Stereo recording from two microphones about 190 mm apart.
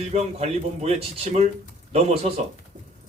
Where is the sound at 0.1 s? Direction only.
35° right (ahead or behind).